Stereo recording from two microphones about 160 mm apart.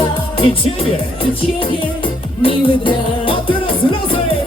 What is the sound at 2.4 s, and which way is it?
Music, 35° left (ahead or behind).